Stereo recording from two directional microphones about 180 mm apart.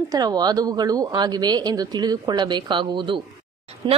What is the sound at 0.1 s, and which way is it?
A woman's voice, 20° right (ahead or behind).